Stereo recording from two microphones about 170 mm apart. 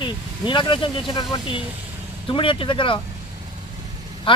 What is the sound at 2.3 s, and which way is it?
Speech, 30° left (ahead or behind).